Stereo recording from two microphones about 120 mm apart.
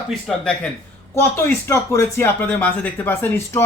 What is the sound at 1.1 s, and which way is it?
Speech, 25° left (ahead or behind).